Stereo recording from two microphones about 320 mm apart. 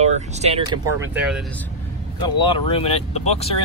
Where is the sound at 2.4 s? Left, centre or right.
Centre.